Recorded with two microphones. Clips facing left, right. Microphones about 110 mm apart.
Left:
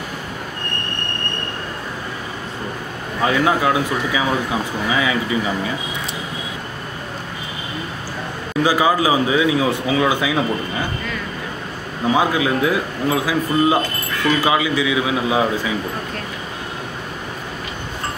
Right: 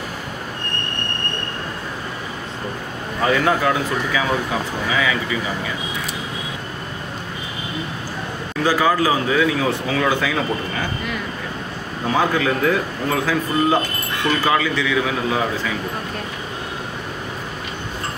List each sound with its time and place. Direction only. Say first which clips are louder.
3.4 s a man's voice: left 1 dB; 15° left (ahead or behind)
4.9 s speech: left 2 dB; 25° left (ahead or behind)
8.6 s a man's voice: left 1 dB; 15° left (ahead or behind)
12.1 s a man's voice: left 1 dB; 10° left (ahead or behind)